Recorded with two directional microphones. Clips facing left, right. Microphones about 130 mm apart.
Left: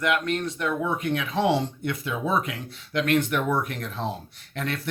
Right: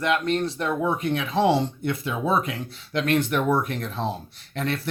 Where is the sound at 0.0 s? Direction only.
30° right (ahead or behind).